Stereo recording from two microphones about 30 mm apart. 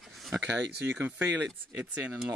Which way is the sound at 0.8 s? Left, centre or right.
Right.